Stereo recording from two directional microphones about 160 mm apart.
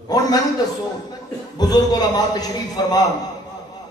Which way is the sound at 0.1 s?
25° left (ahead or behind).